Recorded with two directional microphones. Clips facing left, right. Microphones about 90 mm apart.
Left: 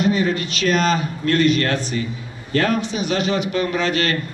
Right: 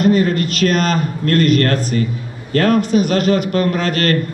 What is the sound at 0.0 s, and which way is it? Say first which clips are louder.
Speech: right 5 dB; 45° right (ahead or behind).